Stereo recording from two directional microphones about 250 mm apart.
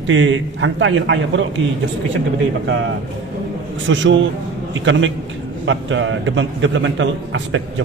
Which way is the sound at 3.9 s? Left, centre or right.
Right.